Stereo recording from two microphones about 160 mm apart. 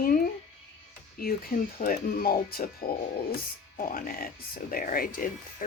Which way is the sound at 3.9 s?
65° left (ahead or behind).